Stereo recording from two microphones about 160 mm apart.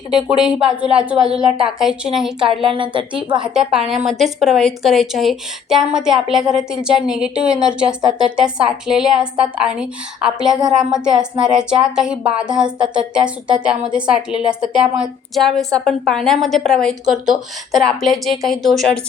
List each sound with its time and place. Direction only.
0.1 s a woman's voice: 5° right (ahead or behind)
2.5 s a woman's voice: 35° right (ahead or behind)
3.3 s a woman's voice: 5° right (ahead or behind)